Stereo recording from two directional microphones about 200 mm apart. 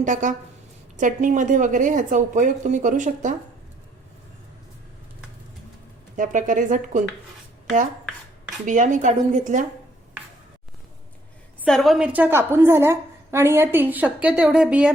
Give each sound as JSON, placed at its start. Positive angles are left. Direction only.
{"t": 0.0, "sound": "a woman's voice", "side_deg": -40}
{"t": 6.1, "sound": "a woman's voice", "side_deg": -40}
{"t": 8.6, "sound": "a woman's voice", "side_deg": -40}
{"t": 11.6, "sound": "a woman's voice", "side_deg": 0}